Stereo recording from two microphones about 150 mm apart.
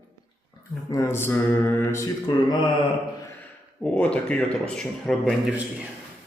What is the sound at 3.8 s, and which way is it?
A man's voice, 10° left (ahead or behind).